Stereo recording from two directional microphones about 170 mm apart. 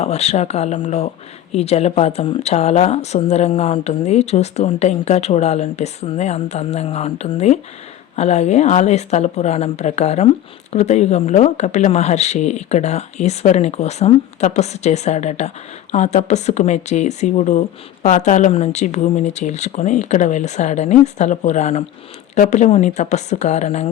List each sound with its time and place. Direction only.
0.0 s speech: 40° left (ahead or behind)